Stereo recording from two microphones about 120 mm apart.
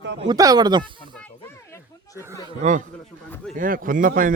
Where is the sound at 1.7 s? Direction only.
25° left (ahead or behind).